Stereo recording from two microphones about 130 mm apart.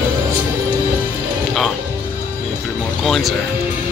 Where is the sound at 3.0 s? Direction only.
Centre (ahead or behind).